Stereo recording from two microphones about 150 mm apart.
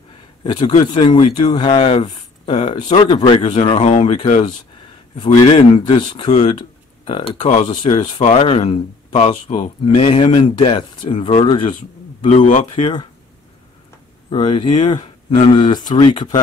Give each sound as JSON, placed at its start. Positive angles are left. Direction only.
{"t": 0.4, "sound": "speech", "side_deg": 30}
{"t": 5.5, "sound": "speech", "side_deg": 35}
{"t": 7.4, "sound": "speech", "side_deg": 50}
{"t": 7.7, "sound": "speech", "side_deg": 35}
{"t": 8.2, "sound": "speech", "side_deg": 45}
{"t": 12.3, "sound": "speech", "side_deg": 55}
{"t": 12.7, "sound": "speech", "side_deg": 30}
{"t": 14.3, "sound": "speech", "side_deg": 30}